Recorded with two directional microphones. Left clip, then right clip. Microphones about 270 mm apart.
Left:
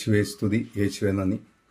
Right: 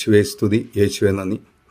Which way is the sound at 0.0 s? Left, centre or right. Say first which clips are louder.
Right 9 dB; right.